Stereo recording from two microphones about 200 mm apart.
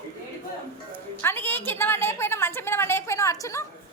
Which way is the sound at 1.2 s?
10° left (ahead or behind).